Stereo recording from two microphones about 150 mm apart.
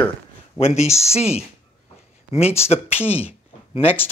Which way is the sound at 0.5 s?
45° left (ahead or behind).